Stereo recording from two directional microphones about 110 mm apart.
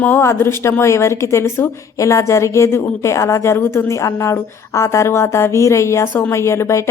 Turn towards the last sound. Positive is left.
turn(degrees=25)  # may be behind; listen again after turning